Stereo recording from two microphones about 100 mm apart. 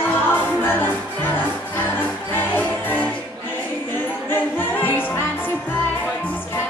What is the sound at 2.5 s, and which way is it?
Music, 15° left (ahead or behind).